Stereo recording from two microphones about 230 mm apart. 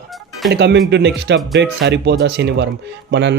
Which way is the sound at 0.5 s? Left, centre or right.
Right.